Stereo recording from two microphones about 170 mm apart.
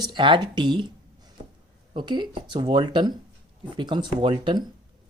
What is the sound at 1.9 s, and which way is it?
Speech, 25° right (ahead or behind).